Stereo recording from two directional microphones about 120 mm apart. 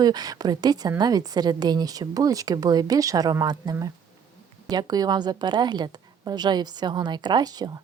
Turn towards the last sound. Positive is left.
turn(degrees=-35)  # may be behind; listen again after turning